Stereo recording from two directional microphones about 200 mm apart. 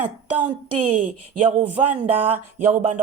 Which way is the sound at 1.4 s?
25° right (ahead or behind).